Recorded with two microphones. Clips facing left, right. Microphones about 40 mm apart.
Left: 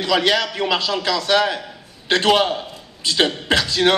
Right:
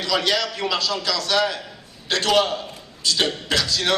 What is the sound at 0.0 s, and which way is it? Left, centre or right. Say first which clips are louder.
A man's voice: left 4 dB; left.